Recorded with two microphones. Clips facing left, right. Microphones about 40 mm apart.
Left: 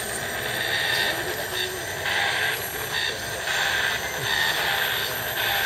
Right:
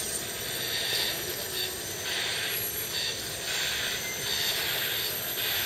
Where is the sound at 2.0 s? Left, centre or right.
Left.